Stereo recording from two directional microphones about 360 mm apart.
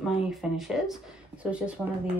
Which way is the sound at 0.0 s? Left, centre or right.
Centre.